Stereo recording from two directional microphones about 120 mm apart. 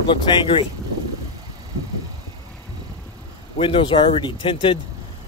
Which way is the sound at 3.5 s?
45° left (ahead or behind).